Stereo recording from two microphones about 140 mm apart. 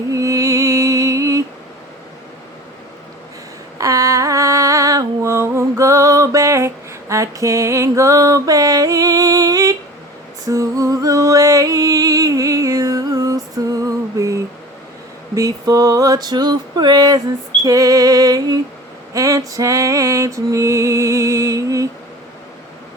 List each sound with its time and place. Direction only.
0.1 s music: 25° right (ahead or behind)
3.8 s music: 25° right (ahead or behind)
13.8 s a sound: 25° right (ahead or behind)
17.6 s female singing: 25° right (ahead or behind)
19.1 s music: 25° right (ahead or behind)